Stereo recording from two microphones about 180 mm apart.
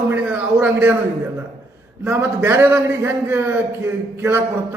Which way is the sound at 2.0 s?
10° right (ahead or behind).